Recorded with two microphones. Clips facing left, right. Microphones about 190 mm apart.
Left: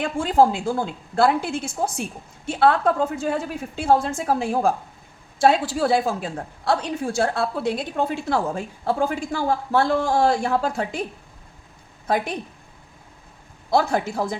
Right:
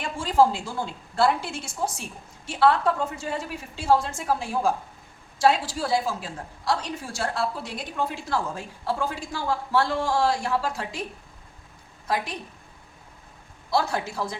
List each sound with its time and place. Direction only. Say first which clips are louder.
0.0 s a woman's voice: left 3 dB; 60° left (ahead or behind)
12.0 s a woman's voice: left 5 dB; 55° left (ahead or behind)
13.7 s a woman's voice: left 5 dB; 55° left (ahead or behind)